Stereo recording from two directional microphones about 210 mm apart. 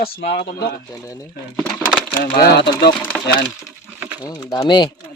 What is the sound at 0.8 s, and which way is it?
Speech, 15° left (ahead or behind).